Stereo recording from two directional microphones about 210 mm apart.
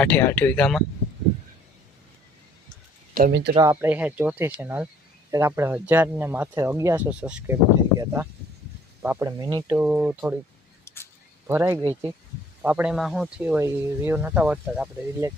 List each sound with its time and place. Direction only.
0.0 s speech: 10° left (ahead or behind)
3.2 s speech: 50° right (ahead or behind)
3.5 s speech: 15° right (ahead or behind)
9.7 s speech: 10° right (ahead or behind)
10.8 s a sound: 10° left (ahead or behind)
11.4 s speech: 10° right (ahead or behind)